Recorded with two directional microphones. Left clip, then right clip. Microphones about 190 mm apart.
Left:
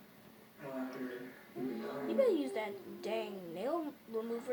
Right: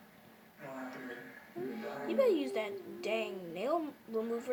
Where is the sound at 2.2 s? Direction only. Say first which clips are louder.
Right 2 dB; 25° right (ahead or behind).